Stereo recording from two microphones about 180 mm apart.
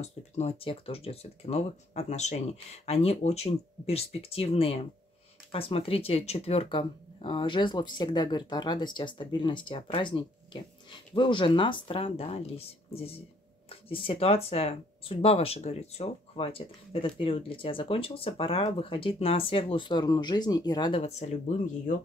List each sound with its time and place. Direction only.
0.0 s speech: 35° left (ahead or behind)
21.0 s speech: 35° left (ahead or behind)